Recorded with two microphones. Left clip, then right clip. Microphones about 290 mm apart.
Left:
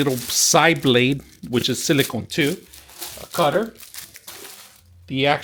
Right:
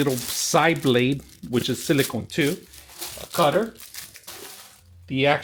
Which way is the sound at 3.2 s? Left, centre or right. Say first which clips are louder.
Left 1 dB; left.